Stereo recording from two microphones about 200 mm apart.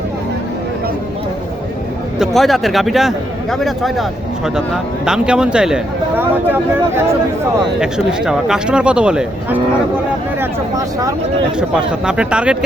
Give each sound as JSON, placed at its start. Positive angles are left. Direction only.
{"t": 2.1, "sound": "speech", "side_deg": 0}
{"t": 10.4, "sound": "speech", "side_deg": -15}
{"t": 11.7, "sound": "speech", "side_deg": -5}